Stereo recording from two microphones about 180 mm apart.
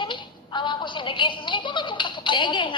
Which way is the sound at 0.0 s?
25° left (ahead or behind).